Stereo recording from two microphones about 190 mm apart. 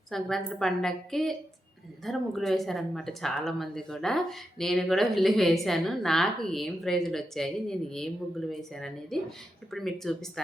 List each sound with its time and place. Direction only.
0.1 s speech: centre (ahead or behind)